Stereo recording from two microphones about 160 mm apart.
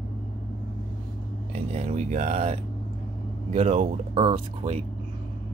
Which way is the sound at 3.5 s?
40° right (ahead or behind).